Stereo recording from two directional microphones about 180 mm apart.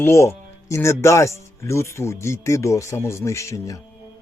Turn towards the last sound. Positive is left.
turn(degrees=15)  # may be behind; listen again after turning